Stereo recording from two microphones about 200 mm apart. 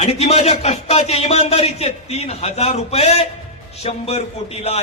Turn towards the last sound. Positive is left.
turn(degrees=30)  # may be behind; listen again after turning